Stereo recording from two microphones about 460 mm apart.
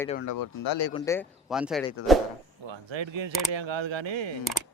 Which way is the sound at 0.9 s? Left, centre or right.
Centre.